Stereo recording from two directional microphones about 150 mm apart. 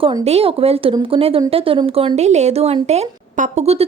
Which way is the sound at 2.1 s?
50° right (ahead or behind).